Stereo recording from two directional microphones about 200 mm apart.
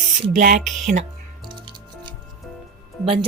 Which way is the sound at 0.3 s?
40° right (ahead or behind).